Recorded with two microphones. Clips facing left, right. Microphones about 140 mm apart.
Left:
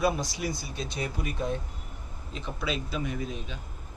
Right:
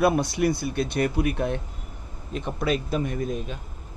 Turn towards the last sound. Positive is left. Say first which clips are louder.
# right 6 dB
turn(degrees=-50)  # may be behind; listen again after turning